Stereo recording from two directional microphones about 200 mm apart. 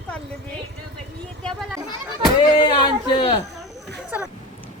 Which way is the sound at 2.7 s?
20° left (ahead or behind).